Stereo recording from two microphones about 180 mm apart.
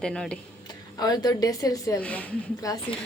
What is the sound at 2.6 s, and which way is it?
Speech, 20° left (ahead or behind).